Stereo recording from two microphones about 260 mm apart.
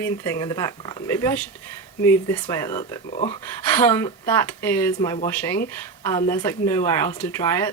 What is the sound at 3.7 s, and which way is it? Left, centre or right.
Speech, centre.